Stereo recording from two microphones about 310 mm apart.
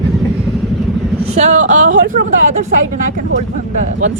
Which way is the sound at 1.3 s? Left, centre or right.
Right.